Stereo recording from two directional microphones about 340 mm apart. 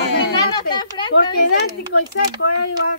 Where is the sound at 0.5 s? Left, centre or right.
Centre.